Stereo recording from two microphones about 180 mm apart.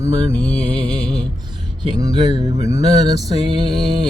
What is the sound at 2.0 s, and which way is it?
Speech, 20° right (ahead or behind).